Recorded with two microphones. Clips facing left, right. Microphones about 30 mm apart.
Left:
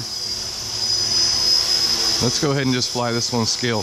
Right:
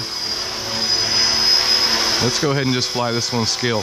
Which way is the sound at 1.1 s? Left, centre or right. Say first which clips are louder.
Right 2 dB; right.